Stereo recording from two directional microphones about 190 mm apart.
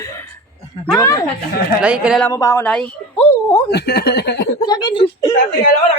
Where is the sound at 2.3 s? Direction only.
15° left (ahead or behind).